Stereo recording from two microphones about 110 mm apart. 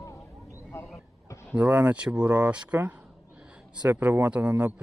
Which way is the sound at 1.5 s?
10° right (ahead or behind).